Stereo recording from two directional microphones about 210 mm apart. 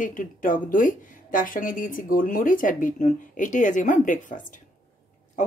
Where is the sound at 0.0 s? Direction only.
40° left (ahead or behind).